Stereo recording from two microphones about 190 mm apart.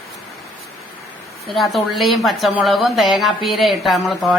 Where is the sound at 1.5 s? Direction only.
Centre (ahead or behind).